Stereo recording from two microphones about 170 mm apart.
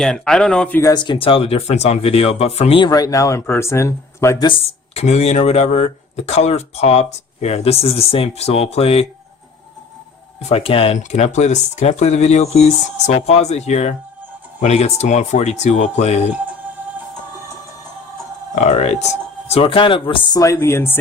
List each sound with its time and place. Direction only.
0.0 s speech: 5° left (ahead or behind)
0.8 s speech: 25° left (ahead or behind)
2.9 s speech: 20° left (ahead or behind)
4.4 s speech: 35° left (ahead or behind)
10.5 s speech: 35° left (ahead or behind)
18.5 s speech: 40° left (ahead or behind); by 21.0 s 15° left (ahead or behind)